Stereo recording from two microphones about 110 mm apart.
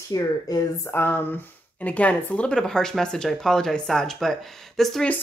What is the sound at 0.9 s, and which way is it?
Speech, 20° left (ahead or behind).